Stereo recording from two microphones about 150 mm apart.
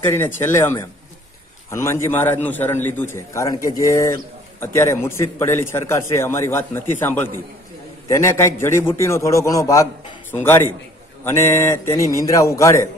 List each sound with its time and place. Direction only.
0.0 s a man's voice: 15° left (ahead or behind)